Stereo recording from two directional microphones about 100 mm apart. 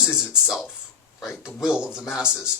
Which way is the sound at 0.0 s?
5° right (ahead or behind).